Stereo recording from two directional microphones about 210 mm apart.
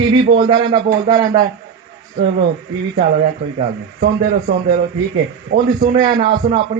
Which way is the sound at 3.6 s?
40° right (ahead or behind).